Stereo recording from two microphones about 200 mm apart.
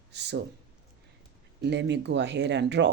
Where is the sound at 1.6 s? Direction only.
60° right (ahead or behind).